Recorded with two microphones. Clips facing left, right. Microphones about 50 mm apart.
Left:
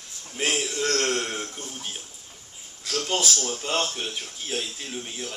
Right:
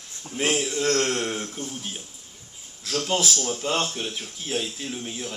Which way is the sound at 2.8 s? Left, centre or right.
Centre.